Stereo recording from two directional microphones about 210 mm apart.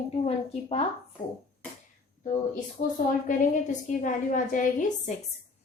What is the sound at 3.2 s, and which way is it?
A woman's voice, 40° left (ahead or behind).